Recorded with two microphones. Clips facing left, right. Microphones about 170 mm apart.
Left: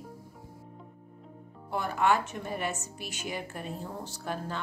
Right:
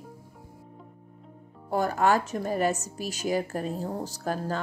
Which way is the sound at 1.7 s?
40° right (ahead or behind).